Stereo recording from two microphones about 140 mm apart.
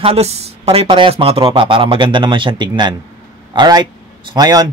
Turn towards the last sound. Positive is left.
turn(degrees=-25)  # may be behind; listen again after turning